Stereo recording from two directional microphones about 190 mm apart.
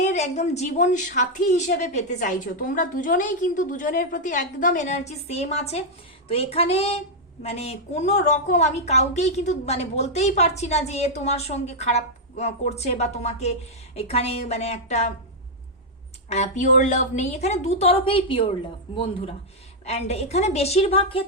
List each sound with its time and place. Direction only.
0.0 s a woman's voice: 35° left (ahead or behind)
16.3 s a woman's voice: 40° left (ahead or behind)